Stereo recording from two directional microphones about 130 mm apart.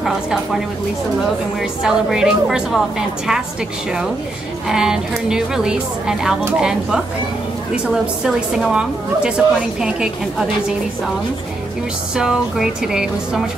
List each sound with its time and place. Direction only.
1.6 s a woman's voice: 5° right (ahead or behind)
4.6 s a woman's voice: 5° right (ahead or behind)
12.2 s a woman's voice: 5° right (ahead or behind)